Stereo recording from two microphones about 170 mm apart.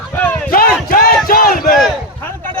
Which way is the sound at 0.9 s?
60° left (ahead or behind).